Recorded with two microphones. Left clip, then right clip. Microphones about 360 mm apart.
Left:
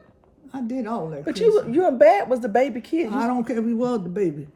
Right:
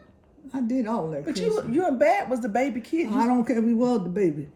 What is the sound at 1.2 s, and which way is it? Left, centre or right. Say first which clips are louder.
A man's voice: left 12 dB; left.